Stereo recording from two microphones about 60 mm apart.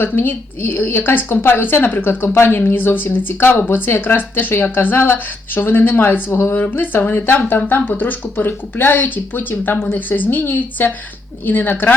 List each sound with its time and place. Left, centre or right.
0.0 s speech: left
2.0 s speech: left